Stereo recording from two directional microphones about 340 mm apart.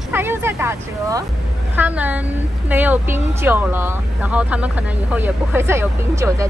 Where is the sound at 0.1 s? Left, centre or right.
Centre.